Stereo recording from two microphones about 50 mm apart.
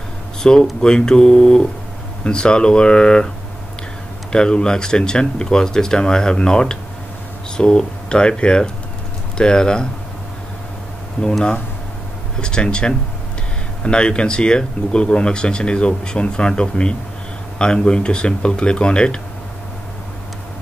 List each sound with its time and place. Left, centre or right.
0.4 s speech: centre
4.3 s speech: centre
11.2 s speech: centre